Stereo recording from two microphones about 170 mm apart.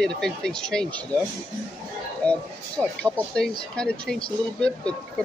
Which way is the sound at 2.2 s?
5° left (ahead or behind).